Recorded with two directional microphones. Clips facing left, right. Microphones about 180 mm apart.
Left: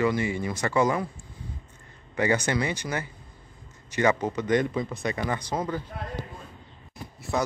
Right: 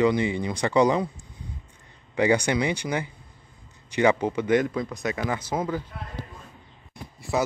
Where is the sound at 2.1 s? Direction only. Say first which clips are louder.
Right 3 dB; 10° right (ahead or behind).